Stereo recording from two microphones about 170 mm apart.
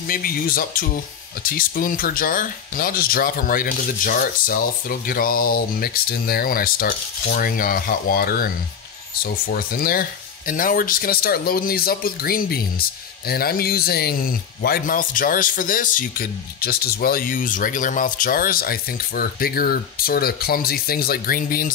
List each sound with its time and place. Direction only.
0.0 s speech: 60° left (ahead or behind)